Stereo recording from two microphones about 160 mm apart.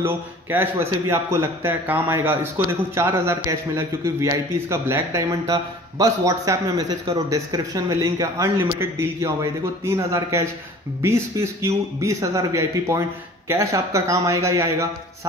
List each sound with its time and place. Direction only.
0.0 s a man's voice: 15° right (ahead or behind)